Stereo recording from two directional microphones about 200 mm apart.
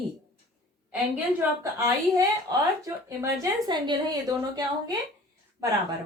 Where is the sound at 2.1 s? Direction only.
15° right (ahead or behind).